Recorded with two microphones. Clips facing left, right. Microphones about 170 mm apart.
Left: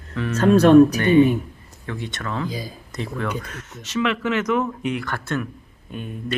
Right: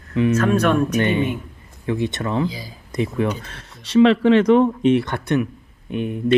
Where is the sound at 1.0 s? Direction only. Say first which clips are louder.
Left 4 dB; 25° right (ahead or behind).